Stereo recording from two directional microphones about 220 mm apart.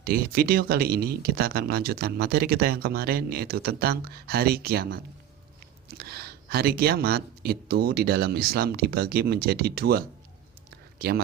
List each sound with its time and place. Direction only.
0.0 s speech: 45° right (ahead or behind)